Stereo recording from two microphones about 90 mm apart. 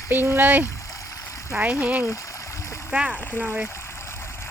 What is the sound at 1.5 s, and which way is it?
Speech, 15° right (ahead or behind).